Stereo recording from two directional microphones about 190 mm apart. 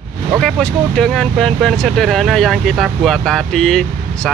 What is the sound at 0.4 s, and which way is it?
Speech, 5° left (ahead or behind).